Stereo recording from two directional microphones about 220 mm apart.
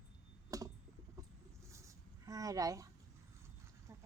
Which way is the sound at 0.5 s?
15° right (ahead or behind).